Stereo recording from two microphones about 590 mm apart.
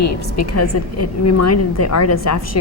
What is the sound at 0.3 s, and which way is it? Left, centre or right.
A woman's voice, left.